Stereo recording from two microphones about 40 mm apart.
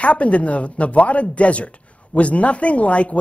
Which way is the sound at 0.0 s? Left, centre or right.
Left.